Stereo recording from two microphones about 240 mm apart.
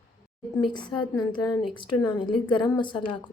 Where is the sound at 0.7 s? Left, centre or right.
Centre.